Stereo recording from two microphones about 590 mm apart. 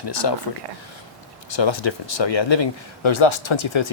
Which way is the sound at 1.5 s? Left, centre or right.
Left.